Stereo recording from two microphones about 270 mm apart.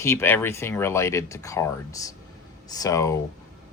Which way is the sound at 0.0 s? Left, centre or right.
Centre.